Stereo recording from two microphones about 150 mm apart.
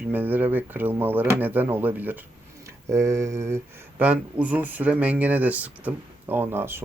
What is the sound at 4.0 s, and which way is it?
Speech, 10° right (ahead or behind).